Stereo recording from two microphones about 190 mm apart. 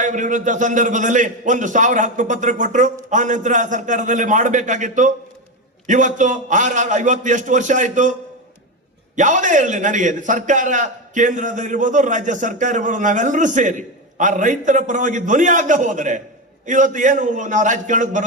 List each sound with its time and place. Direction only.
0.0 s a man's voice: 40° right (ahead or behind)
9.1 s a man's voice: 40° right (ahead or behind)